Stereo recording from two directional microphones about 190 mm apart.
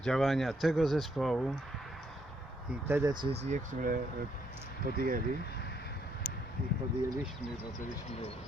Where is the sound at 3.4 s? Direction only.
40° right (ahead or behind).